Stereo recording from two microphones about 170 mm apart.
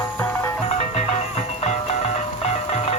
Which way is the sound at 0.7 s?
40° left (ahead or behind).